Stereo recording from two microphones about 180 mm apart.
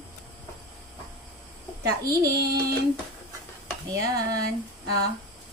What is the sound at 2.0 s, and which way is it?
Speech, 20° right (ahead or behind).